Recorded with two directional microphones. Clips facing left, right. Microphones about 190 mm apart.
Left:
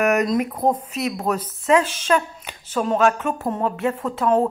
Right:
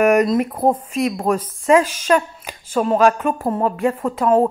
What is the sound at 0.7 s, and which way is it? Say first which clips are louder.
A woman's voice: right 5 dB; 10° right (ahead or behind).